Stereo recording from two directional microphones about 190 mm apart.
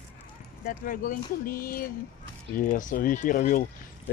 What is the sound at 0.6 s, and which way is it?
Speech, 45° left (ahead or behind).